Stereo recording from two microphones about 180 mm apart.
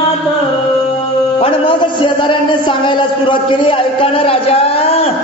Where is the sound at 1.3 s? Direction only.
30° left (ahead or behind).